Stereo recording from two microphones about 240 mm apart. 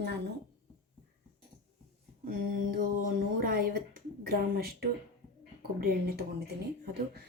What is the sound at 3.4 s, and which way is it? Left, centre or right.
Speech, right.